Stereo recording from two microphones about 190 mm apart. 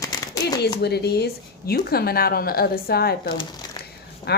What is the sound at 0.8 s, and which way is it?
A woman's voice, 60° left (ahead or behind).